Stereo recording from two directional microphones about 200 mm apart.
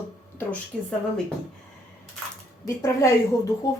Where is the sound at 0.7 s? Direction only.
5° left (ahead or behind).